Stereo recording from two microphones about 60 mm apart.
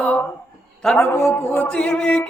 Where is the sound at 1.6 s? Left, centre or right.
Centre.